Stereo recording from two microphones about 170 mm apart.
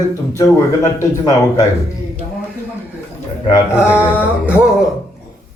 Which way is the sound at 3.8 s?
15° left (ahead or behind).